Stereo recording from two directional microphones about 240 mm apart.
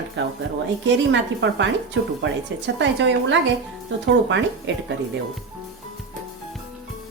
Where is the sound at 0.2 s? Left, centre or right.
Right.